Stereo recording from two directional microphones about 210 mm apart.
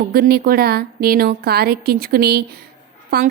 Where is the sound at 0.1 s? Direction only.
45° right (ahead or behind).